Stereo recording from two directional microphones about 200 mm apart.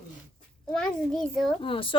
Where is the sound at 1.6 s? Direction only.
25° left (ahead or behind).